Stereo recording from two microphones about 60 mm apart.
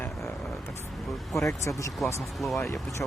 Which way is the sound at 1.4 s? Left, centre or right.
Left.